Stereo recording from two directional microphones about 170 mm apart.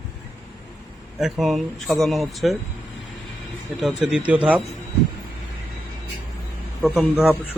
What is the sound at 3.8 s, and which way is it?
Speech, centre (ahead or behind).